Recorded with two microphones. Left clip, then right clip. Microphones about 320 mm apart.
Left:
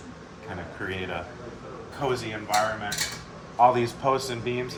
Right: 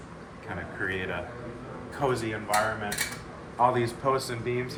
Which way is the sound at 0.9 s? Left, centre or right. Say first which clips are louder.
Even; centre.